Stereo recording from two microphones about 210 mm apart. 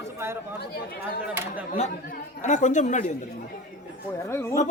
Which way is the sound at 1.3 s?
10° right (ahead or behind).